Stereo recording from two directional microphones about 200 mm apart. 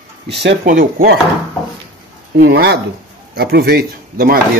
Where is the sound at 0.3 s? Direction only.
60° right (ahead or behind).